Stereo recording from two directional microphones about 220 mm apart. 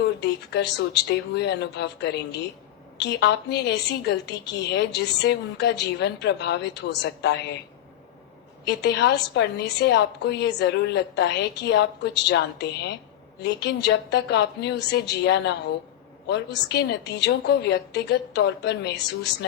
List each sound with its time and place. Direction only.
0.2 s a woman's voice: 50° left (ahead or behind)
8.6 s a woman's voice: 50° left (ahead or behind)